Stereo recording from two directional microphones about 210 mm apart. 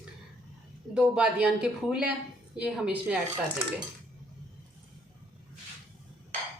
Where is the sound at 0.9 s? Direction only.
5° right (ahead or behind).